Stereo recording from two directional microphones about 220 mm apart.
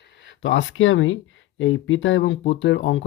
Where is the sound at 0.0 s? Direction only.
55° left (ahead or behind).